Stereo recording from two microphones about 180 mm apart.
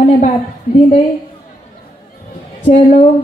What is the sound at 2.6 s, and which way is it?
Speech, 40° left (ahead or behind).